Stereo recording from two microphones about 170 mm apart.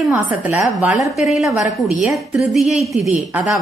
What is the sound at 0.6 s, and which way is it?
A woman's voice, centre (ahead or behind).